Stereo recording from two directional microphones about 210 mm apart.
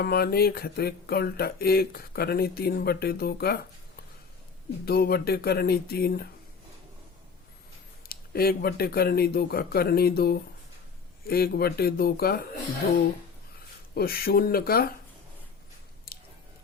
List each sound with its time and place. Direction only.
0.0 s speech: 45° left (ahead or behind)
4.9 s speech: 45° left (ahead or behind)
8.0 s speech: 45° left (ahead or behind)
13.9 s speech: 45° left (ahead or behind)
16.1 s squish: 45° left (ahead or behind)